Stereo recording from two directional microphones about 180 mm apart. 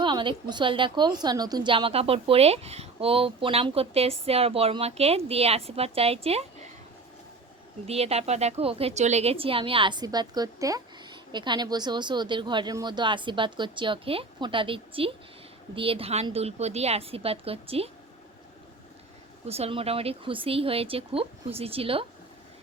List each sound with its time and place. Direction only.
0.0 s a woman's voice: 25° right (ahead or behind)
7.9 s a woman's voice: 35° right (ahead or behind)
19.5 s a woman's voice: 35° right (ahead or behind)